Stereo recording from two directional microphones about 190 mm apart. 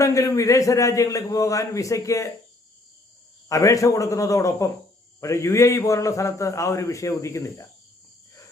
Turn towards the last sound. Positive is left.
turn(degrees=15)  # may be behind; listen again after turning